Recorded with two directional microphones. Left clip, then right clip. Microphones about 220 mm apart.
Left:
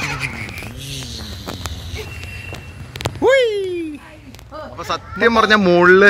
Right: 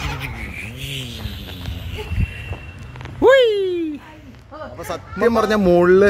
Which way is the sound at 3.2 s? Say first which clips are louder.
Right 2 dB; 30° right (ahead or behind).